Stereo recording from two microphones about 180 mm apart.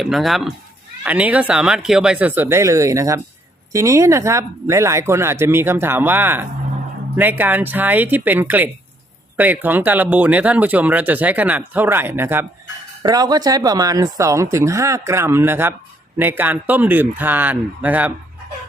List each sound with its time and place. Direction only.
0.0 s speech: centre (ahead or behind)